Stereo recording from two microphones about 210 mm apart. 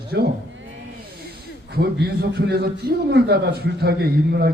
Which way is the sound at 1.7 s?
50° right (ahead or behind).